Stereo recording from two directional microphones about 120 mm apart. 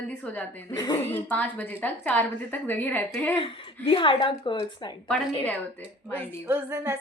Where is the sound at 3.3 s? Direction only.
45° left (ahead or behind).